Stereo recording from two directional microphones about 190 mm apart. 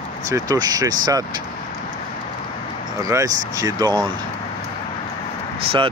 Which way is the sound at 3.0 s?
15° right (ahead or behind).